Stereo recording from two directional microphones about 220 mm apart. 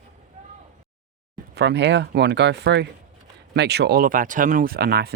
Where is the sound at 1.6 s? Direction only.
50° right (ahead or behind).